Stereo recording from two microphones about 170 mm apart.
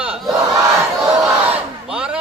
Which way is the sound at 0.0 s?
5° right (ahead or behind).